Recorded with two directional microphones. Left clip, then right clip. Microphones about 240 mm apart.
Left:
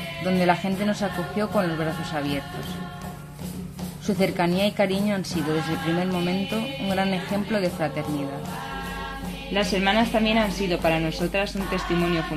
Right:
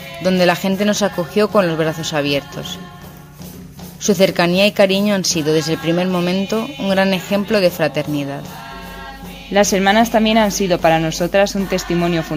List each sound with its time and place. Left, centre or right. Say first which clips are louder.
0.2 s a man's voice: right 8 dB; right
4.0 s a man's voice: right 10 dB; right
9.5 s a woman's voice: right 9 dB; right